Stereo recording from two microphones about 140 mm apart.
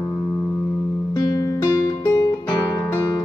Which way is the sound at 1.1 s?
25° left (ahead or behind).